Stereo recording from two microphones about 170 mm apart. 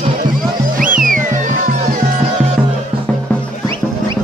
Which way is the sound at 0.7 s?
55° right (ahead or behind).